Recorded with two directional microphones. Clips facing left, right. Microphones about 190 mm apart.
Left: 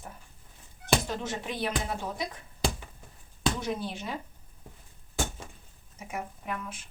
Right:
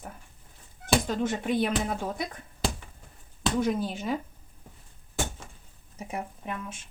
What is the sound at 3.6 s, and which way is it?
Speech, 45° right (ahead or behind).